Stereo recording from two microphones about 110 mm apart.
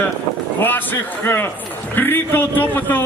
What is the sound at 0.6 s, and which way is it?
A man's voice, 20° left (ahead or behind).